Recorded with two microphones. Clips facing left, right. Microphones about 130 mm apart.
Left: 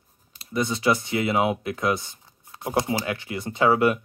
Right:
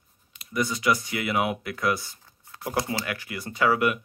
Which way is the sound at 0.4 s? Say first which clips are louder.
Left 2 dB; 25° left (ahead or behind).